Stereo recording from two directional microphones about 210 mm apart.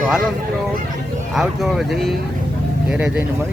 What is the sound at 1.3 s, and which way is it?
Speech, centre (ahead or behind).